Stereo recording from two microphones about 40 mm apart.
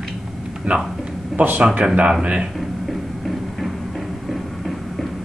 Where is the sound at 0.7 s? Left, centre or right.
Right.